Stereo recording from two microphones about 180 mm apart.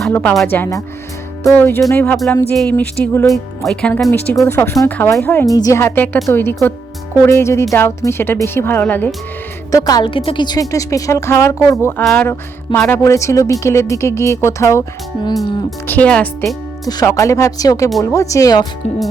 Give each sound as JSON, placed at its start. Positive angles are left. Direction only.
{"t": 0.0, "sound": "speech", "side_deg": 5}
{"t": 9.7, "sound": "a woman's voice", "side_deg": 20}
{"t": 15.9, "sound": "speech", "side_deg": 10}
{"t": 16.8, "sound": "a woman's voice", "side_deg": 20}